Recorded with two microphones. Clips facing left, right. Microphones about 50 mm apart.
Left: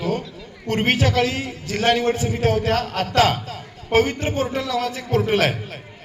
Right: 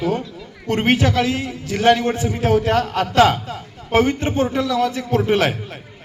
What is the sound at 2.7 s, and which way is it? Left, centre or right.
A man's voice, right.